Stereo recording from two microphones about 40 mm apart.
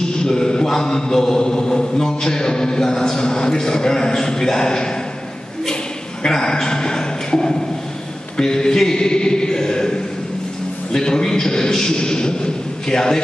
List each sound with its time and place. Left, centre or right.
0.2 s mantra: centre
0.7 s a man's voice: centre
6.2 s a man's voice: centre
11.0 s a man's voice: centre